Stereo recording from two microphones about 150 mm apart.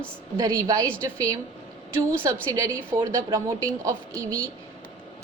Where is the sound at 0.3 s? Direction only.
25° right (ahead or behind).